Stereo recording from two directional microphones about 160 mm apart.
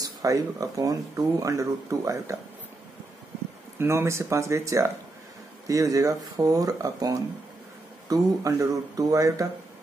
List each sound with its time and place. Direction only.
0.0 s speech: 20° right (ahead or behind)
3.7 s speech: 15° right (ahead or behind)